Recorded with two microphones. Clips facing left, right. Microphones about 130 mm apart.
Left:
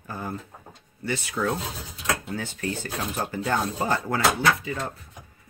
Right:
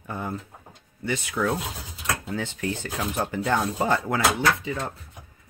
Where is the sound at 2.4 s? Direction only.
20° right (ahead or behind).